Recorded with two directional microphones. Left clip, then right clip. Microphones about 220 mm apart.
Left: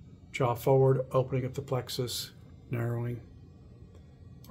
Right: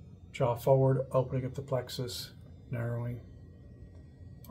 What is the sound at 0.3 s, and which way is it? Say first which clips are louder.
Speech: even; 50° left (ahead or behind).